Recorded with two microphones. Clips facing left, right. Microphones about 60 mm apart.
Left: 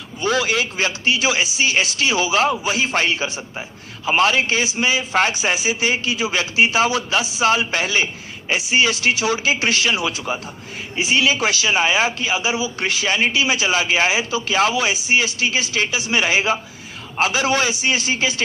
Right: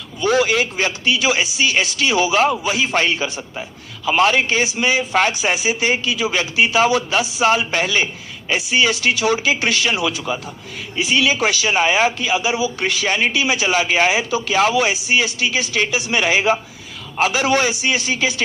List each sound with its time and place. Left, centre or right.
0.3 s a man's voice: right